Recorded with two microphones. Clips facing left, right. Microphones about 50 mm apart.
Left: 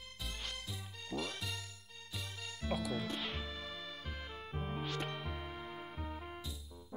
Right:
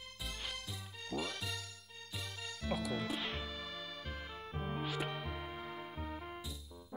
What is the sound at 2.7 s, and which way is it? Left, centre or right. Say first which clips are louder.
Music: even; centre.